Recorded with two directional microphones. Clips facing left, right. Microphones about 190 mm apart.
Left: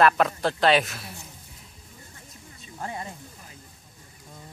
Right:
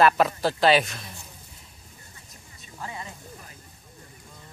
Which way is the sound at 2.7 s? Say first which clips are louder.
Left 3 dB; 45° left (ahead or behind).